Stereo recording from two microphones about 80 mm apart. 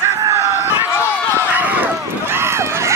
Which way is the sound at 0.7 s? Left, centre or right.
Left.